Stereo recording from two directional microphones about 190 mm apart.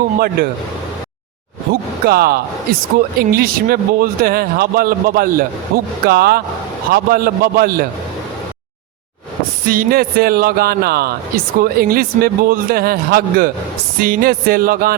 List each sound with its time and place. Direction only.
0.4 s speech: 50° right (ahead or behind)
1.7 s speech: 55° right (ahead or behind)
9.6 s speech: 50° right (ahead or behind)